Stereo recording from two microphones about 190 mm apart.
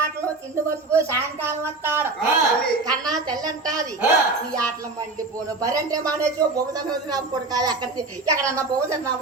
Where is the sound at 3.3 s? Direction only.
20° right (ahead or behind).